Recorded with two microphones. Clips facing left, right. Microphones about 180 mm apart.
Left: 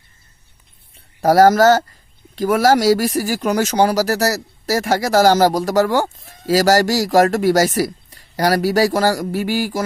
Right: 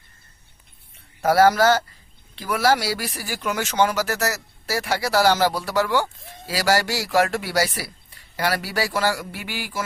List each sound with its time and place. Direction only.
0.9 s speech: 40° left (ahead or behind)